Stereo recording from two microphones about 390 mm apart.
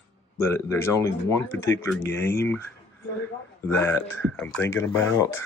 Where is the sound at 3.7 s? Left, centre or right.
Centre.